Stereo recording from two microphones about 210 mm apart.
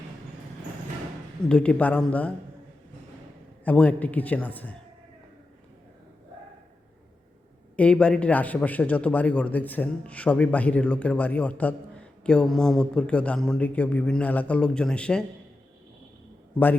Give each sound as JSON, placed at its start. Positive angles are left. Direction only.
{"t": 1.5, "sound": "a man's voice", "side_deg": 5}
{"t": 3.6, "sound": "a man's voice", "side_deg": 5}
{"t": 7.8, "sound": "a man's voice", "side_deg": 5}